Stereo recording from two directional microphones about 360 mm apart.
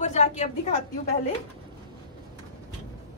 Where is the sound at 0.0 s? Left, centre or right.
Centre.